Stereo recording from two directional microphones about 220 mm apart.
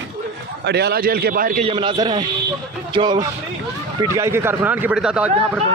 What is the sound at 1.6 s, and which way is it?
A man's voice, 20° right (ahead or behind).